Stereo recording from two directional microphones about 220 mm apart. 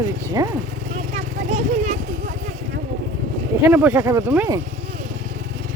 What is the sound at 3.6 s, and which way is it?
Speech, 10° right (ahead or behind).